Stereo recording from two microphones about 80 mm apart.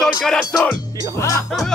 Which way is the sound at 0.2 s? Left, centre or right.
Centre.